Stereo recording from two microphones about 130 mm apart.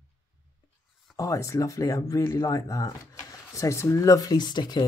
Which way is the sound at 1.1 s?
25° left (ahead or behind).